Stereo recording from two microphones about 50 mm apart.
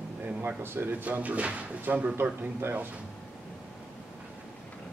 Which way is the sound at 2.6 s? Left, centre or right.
Right.